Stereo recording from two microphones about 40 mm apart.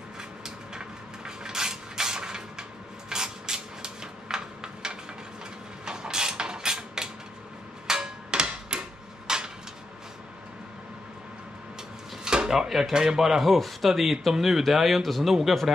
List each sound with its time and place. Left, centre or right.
0.7 s a sound: centre
3.1 s rub: centre
5.9 s mechanisms: centre
7.8 s a sound: centre
12.3 s speech: centre
12.9 s speech: centre